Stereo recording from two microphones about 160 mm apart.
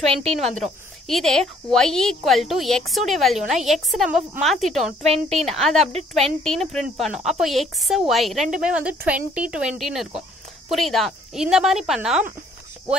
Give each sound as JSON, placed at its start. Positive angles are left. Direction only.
{"t": 0.0, "sound": "a woman's voice", "side_deg": -40}
{"t": 1.0, "sound": "speech", "side_deg": 0}
{"t": 5.0, "sound": "a woman's voice", "side_deg": -40}
{"t": 5.4, "sound": "speech", "side_deg": 0}